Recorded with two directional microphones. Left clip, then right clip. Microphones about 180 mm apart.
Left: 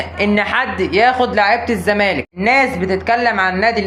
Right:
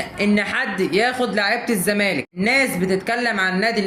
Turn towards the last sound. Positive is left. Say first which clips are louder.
# left 5 dB
turn(degrees=-15)  # may be behind; listen again after turning